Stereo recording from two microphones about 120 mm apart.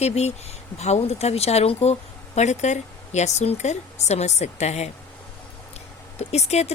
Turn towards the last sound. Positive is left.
turn(degrees=65)  # may be behind; listen again after turning